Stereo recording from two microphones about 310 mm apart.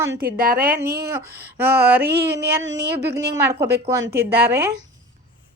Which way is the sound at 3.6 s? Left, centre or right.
Centre.